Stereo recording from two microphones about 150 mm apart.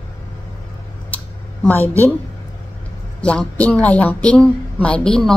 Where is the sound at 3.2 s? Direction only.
5° left (ahead or behind).